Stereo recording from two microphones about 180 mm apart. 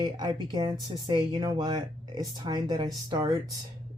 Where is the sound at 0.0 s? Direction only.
25° right (ahead or behind).